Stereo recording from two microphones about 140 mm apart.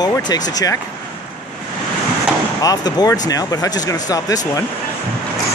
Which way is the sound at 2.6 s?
30° left (ahead or behind).